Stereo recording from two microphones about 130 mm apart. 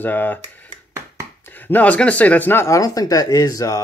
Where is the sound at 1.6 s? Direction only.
10° left (ahead or behind).